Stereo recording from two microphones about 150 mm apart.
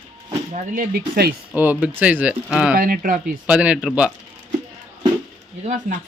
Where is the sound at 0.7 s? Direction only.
75° right (ahead or behind).